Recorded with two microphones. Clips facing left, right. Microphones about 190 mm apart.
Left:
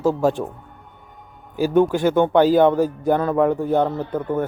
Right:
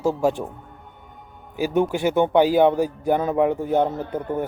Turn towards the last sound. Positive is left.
turn(degrees=-15)  # may be behind; listen again after turning